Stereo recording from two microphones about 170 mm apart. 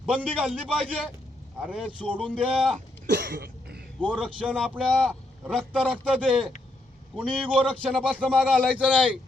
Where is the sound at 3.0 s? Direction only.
90° right; by 3.8 s 70° right (ahead or behind).